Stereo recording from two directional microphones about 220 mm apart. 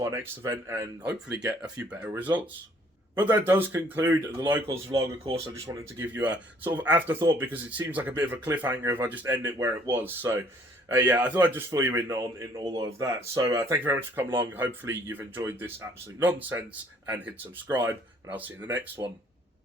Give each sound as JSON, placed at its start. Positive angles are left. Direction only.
{"t": 0.0, "sound": "speech", "side_deg": -15}
{"t": 19.0, "sound": "speech", "side_deg": -15}